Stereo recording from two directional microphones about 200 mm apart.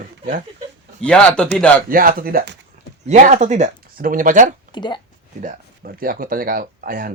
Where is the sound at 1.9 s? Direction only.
45° right (ahead or behind).